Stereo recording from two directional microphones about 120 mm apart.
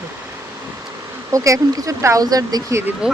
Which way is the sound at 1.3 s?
30° right (ahead or behind).